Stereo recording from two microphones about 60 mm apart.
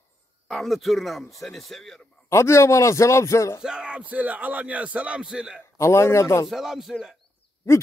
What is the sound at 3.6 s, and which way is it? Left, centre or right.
Speech, centre.